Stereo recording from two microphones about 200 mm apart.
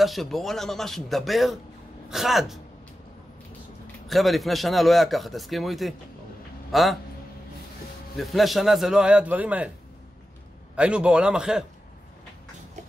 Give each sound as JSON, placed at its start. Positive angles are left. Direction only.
{"t": 0.0, "sound": "a man's voice", "side_deg": 0}
{"t": 4.1, "sound": "a man's voice", "side_deg": 0}
{"t": 8.2, "sound": "a man's voice", "side_deg": 0}
{"t": 10.8, "sound": "a man's voice", "side_deg": -5}